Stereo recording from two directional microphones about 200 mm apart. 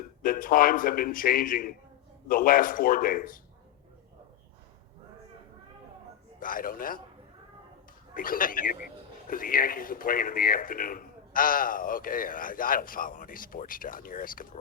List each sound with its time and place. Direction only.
0.2 s speech: 45° left (ahead or behind)
6.4 s speech: 45° left (ahead or behind)
8.1 s speech: 45° left (ahead or behind)